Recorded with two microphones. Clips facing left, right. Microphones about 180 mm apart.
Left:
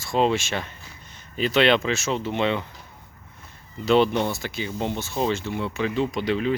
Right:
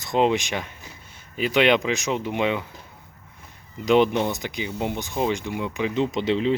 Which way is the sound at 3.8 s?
15° right (ahead or behind).